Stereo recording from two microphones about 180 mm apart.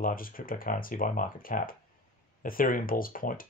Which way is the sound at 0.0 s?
50° left (ahead or behind).